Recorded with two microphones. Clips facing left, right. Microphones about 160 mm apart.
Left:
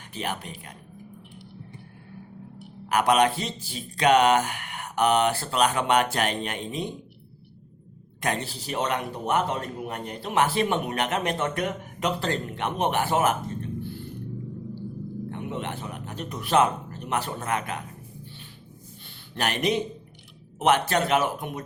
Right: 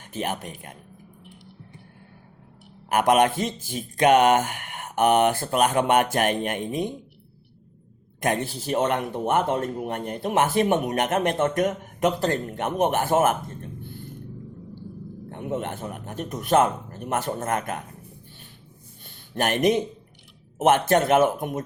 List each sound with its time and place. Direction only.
0.1 s speech: 50° right (ahead or behind)
2.9 s speech: 50° right (ahead or behind)
8.2 s speech: 50° right (ahead or behind)
15.3 s speech: 45° right (ahead or behind)
19.0 s a sound: 45° right (ahead or behind)
20.6 s speech: 50° right (ahead or behind)